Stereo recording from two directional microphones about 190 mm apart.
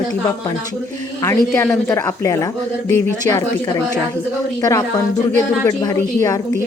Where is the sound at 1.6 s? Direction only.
15° left (ahead or behind).